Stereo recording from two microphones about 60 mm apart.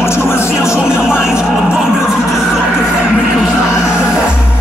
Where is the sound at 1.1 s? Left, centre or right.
Centre.